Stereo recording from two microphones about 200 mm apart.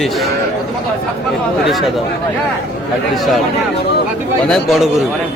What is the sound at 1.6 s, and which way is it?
Speech, centre (ahead or behind).